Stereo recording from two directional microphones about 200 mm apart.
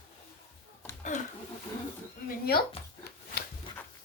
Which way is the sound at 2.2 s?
50° left (ahead or behind).